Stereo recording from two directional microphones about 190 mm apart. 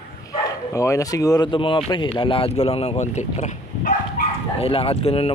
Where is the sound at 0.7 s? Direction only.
15° left (ahead or behind).